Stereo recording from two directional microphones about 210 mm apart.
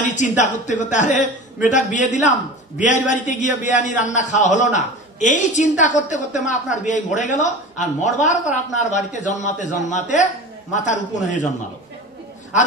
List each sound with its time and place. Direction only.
0.0 s a man's voice: 35° left (ahead or behind)